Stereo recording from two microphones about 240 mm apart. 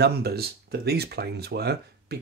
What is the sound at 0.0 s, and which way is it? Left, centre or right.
Speech, right.